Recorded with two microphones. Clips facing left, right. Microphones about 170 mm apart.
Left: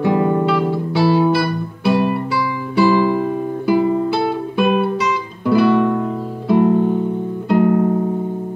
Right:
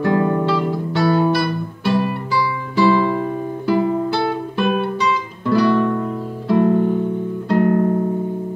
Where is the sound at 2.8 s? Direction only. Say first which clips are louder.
Left 2 dB; 5° left (ahead or behind).